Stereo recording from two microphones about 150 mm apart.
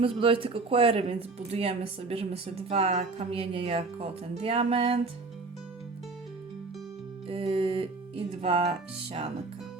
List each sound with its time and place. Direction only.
0.0 s speech: 35° right (ahead or behind)
7.3 s music: 40° right (ahead or behind)